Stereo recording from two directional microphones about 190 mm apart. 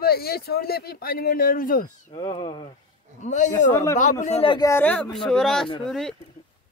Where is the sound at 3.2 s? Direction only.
40° left (ahead or behind).